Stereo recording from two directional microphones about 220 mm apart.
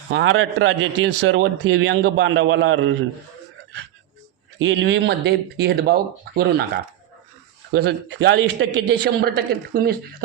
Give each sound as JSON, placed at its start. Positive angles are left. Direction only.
{"t": 0.1, "sound": "a man's voice", "side_deg": -65}
{"t": 4.6, "sound": "speech", "side_deg": -55}
{"t": 7.7, "sound": "speech", "side_deg": -50}